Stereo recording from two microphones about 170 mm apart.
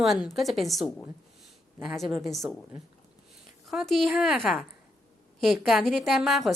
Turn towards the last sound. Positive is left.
turn(degrees=0)  # may be behind; listen again after turning